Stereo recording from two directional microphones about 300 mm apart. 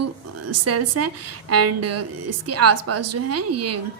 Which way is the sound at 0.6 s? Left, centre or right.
Right.